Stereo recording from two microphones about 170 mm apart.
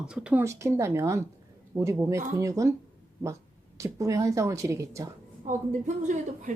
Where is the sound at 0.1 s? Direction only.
5° right (ahead or behind).